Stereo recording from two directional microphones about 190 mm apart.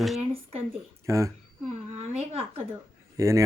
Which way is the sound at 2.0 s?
30° right (ahead or behind).